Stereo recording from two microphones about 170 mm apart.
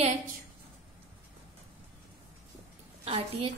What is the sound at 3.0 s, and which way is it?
Speech, 35° right (ahead or behind).